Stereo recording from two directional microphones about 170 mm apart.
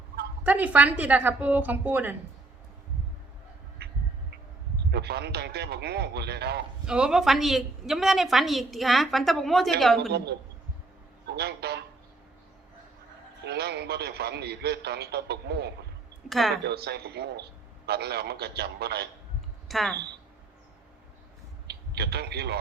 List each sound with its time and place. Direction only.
0.4 s a woman's voice: 10° right (ahead or behind)
3.8 s a sound: 70° right (ahead or behind)
4.9 s a man's voice: 75° right (ahead or behind)
6.8 s a woman's voice: 5° right (ahead or behind)
10.1 s a man's voice: 70° right (ahead or behind)
13.4 s a man's voice: 75° right (ahead or behind)
16.3 s a woman's voice: centre (ahead or behind)
16.6 s a man's voice: 70° right (ahead or behind)
19.6 s speech: centre (ahead or behind)
21.7 s speech: 70° right (ahead or behind)